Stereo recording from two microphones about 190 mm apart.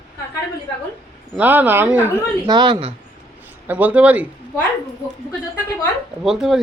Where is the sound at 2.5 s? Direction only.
25° right (ahead or behind).